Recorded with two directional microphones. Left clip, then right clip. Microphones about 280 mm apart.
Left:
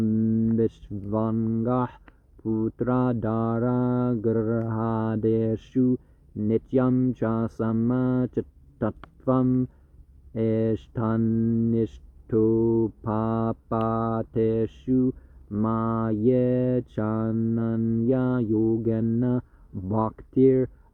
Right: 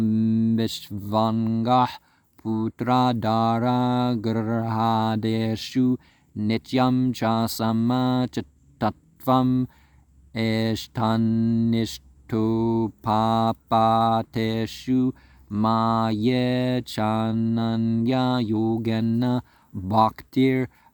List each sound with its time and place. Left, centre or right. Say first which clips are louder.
0.0 s speech: right 2 dB; right
2.4 s mantra: left 1 dB; right
8.4 s speech: right 1 dB; right
10.3 s mantra: left 1 dB; right